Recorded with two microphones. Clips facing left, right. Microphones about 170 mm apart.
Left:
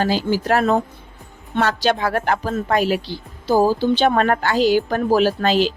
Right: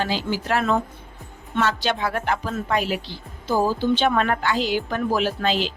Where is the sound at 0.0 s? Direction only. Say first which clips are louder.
Left 6 dB; 40° left (ahead or behind).